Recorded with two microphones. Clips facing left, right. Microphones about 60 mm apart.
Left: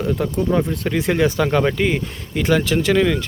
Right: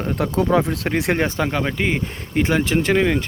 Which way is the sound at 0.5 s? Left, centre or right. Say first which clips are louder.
Right 1 dB; right.